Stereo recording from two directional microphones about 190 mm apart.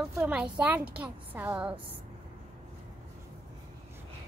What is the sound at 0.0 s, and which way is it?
A woman's voice, 5° right (ahead or behind).